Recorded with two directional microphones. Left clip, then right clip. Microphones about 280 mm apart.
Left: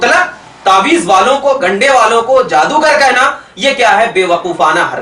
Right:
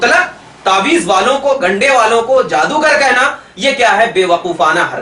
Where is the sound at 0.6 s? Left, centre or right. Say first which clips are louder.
Left 3 dB; centre.